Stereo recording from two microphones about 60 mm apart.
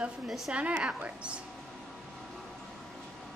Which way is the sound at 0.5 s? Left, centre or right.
Centre.